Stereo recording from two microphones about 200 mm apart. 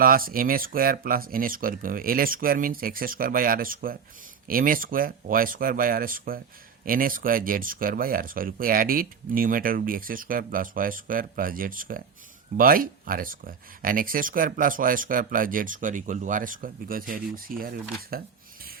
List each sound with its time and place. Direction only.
0.0 s speech: 45° right (ahead or behind)